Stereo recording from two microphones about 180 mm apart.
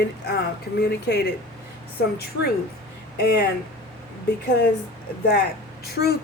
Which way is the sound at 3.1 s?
65° left (ahead or behind).